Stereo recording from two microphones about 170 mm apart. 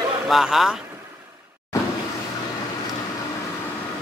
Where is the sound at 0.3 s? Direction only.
Centre (ahead or behind).